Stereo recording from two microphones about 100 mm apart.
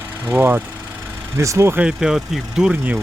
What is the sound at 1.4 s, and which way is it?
Speech, 30° right (ahead or behind).